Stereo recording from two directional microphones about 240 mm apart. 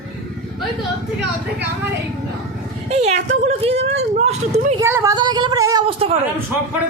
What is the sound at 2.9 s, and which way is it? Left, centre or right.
Speech, right.